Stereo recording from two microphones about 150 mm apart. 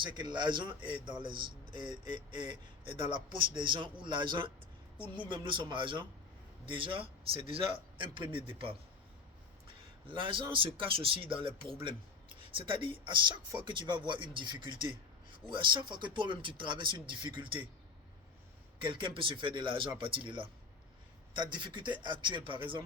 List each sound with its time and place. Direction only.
0.0 s speech: 30° right (ahead or behind)
10.1 s speech: 35° right (ahead or behind)
18.9 s speech: 35° right (ahead or behind)